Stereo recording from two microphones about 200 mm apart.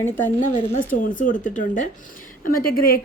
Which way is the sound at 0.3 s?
40° left (ahead or behind).